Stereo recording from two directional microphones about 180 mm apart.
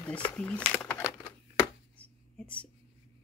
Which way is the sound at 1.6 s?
10° left (ahead or behind).